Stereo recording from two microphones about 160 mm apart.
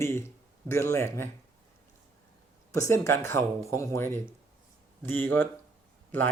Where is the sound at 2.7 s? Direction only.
20° left (ahead or behind).